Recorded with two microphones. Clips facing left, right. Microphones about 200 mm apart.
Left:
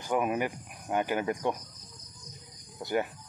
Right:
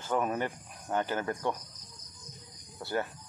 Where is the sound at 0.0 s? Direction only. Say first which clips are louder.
Left 2 dB; 10° left (ahead or behind).